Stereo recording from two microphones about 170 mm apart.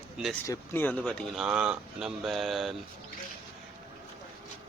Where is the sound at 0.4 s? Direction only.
15° left (ahead or behind).